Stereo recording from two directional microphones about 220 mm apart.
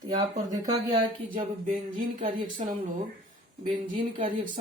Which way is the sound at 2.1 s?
30° right (ahead or behind).